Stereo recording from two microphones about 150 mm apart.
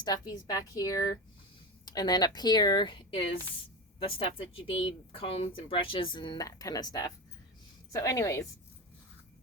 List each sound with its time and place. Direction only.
0.0 s speech: 25° left (ahead or behind)